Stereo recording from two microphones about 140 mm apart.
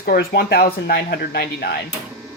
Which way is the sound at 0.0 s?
90° left.